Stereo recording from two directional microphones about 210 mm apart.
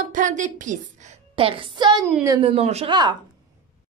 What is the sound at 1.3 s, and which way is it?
Speech, 25° right (ahead or behind).